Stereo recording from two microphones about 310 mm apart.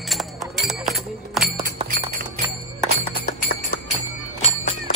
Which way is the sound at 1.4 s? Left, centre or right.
Right.